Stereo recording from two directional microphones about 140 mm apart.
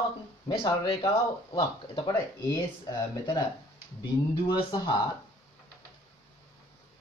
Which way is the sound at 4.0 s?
30° left (ahead or behind).